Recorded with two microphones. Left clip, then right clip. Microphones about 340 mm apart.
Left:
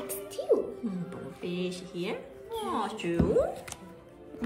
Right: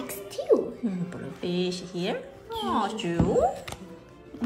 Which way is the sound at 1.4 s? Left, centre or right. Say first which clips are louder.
Right 6 dB; centre.